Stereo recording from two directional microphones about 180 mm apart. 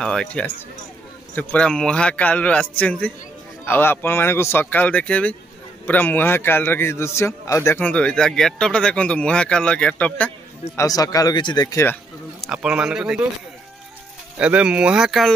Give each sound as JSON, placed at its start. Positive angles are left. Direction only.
{"t": 0.0, "sound": "a man's voice", "side_deg": 5}
{"t": 10.8, "sound": "speech", "side_deg": 20}
{"t": 12.4, "sound": "speech", "side_deg": -5}
{"t": 14.4, "sound": "speech", "side_deg": -5}